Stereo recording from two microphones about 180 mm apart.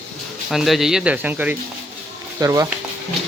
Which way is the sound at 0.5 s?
Centre (ahead or behind).